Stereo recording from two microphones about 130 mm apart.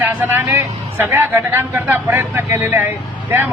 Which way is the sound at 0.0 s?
15° right (ahead or behind).